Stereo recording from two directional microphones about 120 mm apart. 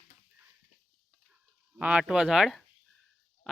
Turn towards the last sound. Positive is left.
turn(degrees=0)  # may be behind; listen again after turning